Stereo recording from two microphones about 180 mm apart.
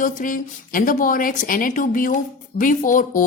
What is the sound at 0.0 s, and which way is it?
A woman's voice, 50° left (ahead or behind).